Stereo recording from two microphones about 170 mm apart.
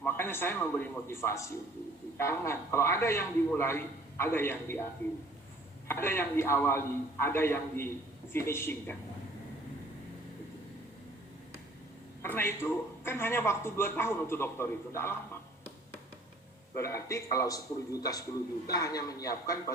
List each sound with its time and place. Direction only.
0.0 s a man's voice: 15° left (ahead or behind)
5.9 s a man's voice: 15° left (ahead or behind)
12.2 s a man's voice: 15° left (ahead or behind)
16.7 s a man's voice: 15° left (ahead or behind)